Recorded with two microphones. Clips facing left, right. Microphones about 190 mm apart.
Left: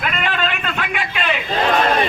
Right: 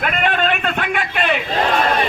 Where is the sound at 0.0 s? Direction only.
50° right (ahead or behind).